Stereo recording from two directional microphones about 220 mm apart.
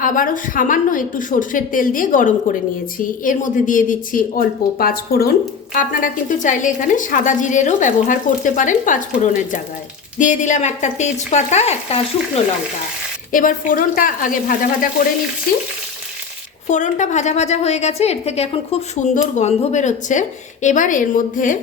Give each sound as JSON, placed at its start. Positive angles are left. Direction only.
{"t": 0.0, "sound": "a woman's voice", "side_deg": 35}
{"t": 10.2, "sound": "a woman's voice", "side_deg": 35}
{"t": 13.3, "sound": "a woman's voice", "side_deg": 40}
{"t": 16.6, "sound": "a woman's voice", "side_deg": 35}